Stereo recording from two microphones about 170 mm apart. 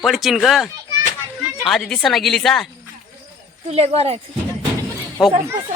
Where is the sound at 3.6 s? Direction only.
35° right (ahead or behind).